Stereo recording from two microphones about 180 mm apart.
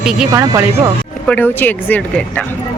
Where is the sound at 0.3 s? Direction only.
15° right (ahead or behind).